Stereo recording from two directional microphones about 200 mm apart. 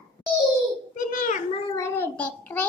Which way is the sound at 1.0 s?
40° left (ahead or behind).